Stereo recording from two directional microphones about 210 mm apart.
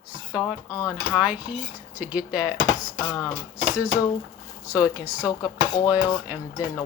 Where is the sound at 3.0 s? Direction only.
15° left (ahead or behind).